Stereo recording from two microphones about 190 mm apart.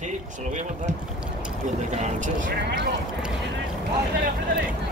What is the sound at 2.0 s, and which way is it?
Vehicle, 40° right (ahead or behind).